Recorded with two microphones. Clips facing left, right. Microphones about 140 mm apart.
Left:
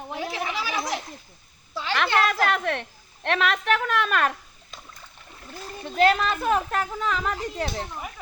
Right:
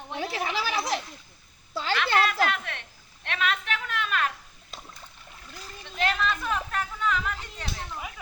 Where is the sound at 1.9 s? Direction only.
50° left (ahead or behind).